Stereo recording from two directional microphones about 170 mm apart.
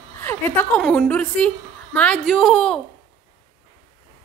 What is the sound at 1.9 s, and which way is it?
Speech, 5° left (ahead or behind).